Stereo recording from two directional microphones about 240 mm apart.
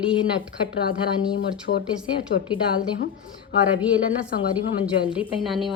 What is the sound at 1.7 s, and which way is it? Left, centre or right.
Speech, left.